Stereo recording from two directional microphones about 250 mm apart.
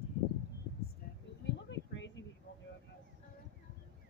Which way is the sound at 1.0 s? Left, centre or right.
Left.